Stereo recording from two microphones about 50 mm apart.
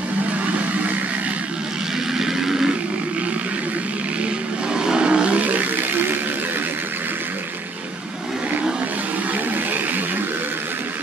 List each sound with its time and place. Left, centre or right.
2.1 s a sound: centre
4.7 s vehicle: centre
5.4 s toilet flush: right